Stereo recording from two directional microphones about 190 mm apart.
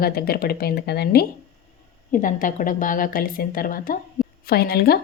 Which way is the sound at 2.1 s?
45° left (ahead or behind).